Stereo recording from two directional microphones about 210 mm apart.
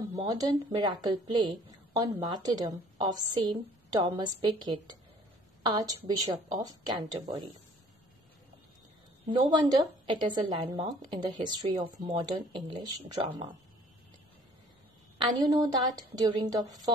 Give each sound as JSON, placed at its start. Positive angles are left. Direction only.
{"t": 0.1, "sound": "a woman's voice", "side_deg": -20}
{"t": 9.2, "sound": "a woman's voice", "side_deg": -20}
{"t": 15.1, "sound": "a woman's voice", "side_deg": -20}